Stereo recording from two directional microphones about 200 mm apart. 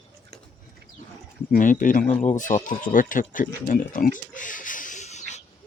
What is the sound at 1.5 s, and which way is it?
Speech, 40° left (ahead or behind).